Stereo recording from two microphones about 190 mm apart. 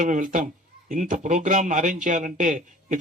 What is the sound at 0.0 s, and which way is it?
Speech, 45° right (ahead or behind).